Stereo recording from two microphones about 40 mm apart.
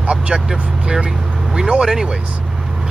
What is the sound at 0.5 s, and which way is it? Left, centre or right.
Speech, centre.